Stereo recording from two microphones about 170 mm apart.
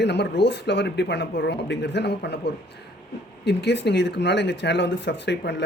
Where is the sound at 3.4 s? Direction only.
90° left.